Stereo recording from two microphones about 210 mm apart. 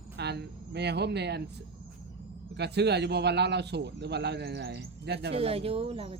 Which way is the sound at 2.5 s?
55° right (ahead or behind).